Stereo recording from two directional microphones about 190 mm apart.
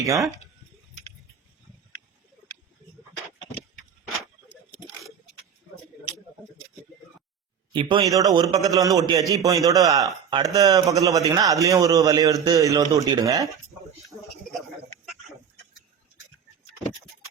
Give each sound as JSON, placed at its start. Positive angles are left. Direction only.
{"t": 4.4, "sound": "a sound", "side_deg": 0}
{"t": 7.7, "sound": "a man's voice", "side_deg": -25}
{"t": 14.3, "sound": "speech", "side_deg": 0}